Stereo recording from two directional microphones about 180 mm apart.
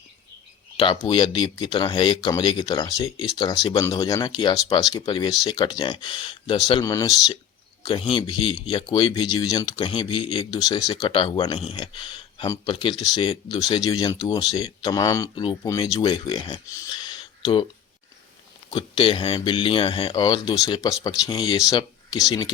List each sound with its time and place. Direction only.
0.8 s speech: 25° left (ahead or behind)
8.1 s speech: 30° left (ahead or behind)
18.7 s speech: 30° left (ahead or behind)
21.7 s a sound: 25° left (ahead or behind)
22.3 s speech: 20° left (ahead or behind)